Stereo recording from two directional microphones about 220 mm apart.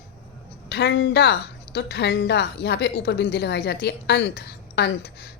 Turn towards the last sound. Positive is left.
turn(degrees=45)  # may be behind; listen again after turning